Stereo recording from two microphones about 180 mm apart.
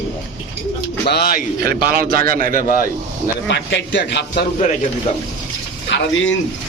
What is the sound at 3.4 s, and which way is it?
A man's voice, 80° left.